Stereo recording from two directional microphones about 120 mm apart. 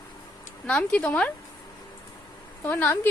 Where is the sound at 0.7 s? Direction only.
10° left (ahead or behind).